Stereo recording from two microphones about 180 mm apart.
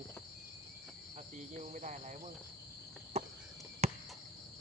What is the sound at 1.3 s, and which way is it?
Speech, 40° right (ahead or behind).